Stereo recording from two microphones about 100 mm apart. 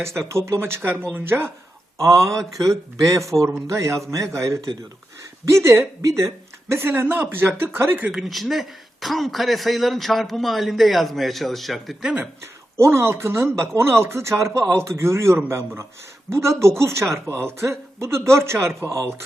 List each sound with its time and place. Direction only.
0.0 s speech: 30° right (ahead or behind)
2.0 s speech: 30° right (ahead or behind)
8.1 s speech: centre (ahead or behind)
12.7 s speech: 25° right (ahead or behind)